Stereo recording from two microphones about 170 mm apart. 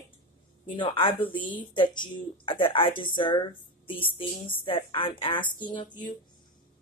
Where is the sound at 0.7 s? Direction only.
30° left (ahead or behind).